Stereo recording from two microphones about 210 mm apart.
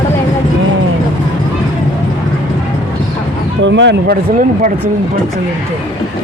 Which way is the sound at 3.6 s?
60° right (ahead or behind).